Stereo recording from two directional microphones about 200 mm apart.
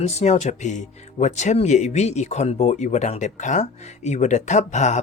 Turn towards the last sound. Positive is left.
turn(degrees=35)  # may be behind; listen again after turning